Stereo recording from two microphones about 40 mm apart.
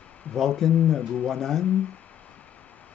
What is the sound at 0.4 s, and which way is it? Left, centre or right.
Speech, centre.